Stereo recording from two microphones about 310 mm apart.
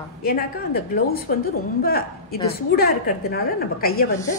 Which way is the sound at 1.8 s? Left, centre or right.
Left.